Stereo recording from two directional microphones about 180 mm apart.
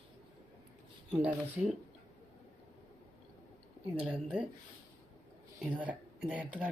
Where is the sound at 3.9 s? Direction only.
5° right (ahead or behind).